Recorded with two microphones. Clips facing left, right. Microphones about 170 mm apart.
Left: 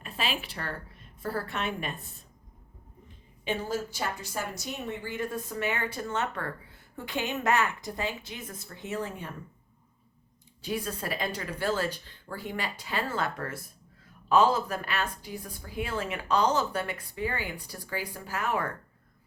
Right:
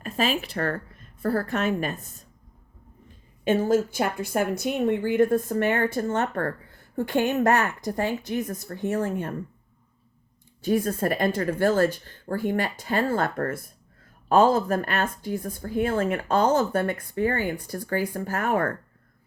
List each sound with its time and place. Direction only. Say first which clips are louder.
0.0 s a woman's voice: right 8 dB; 40° right (ahead or behind)
3.4 s speech: right 10 dB; 45° right (ahead or behind)
10.6 s speech: right 10 dB; 45° right (ahead or behind)